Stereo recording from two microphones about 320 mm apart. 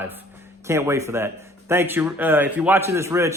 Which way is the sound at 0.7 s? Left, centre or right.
Centre.